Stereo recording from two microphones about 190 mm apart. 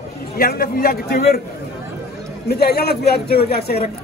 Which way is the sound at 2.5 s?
55° left (ahead or behind).